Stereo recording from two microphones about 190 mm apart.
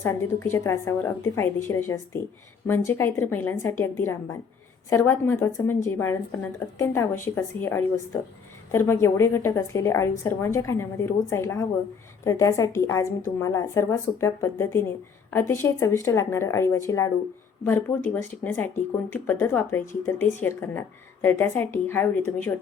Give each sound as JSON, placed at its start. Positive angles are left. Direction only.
{"t": 0.0, "sound": "a woman's voice", "side_deg": 15}